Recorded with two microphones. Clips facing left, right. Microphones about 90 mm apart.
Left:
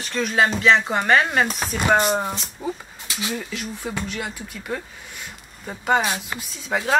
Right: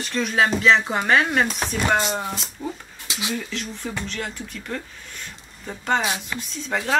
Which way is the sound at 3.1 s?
20° right (ahead or behind).